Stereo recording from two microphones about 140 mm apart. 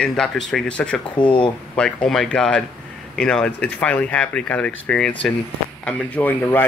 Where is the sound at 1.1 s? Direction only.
35° left (ahead or behind).